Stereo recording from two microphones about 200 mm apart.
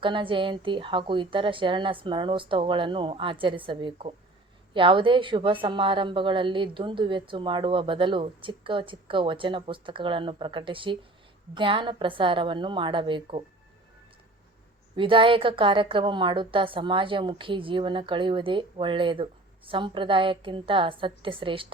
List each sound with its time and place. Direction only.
0.0 s a woman's voice: 25° right (ahead or behind)
14.9 s a woman's voice: 25° right (ahead or behind)